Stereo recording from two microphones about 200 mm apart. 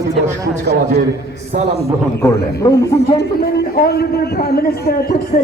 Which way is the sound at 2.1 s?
15° left (ahead or behind).